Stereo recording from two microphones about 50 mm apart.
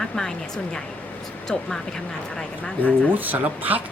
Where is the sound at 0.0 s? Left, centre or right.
Centre.